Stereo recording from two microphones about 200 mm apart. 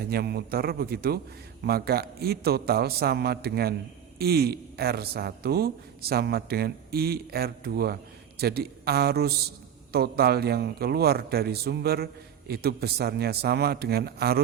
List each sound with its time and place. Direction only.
0.0 s a man's voice: 50° right (ahead or behind)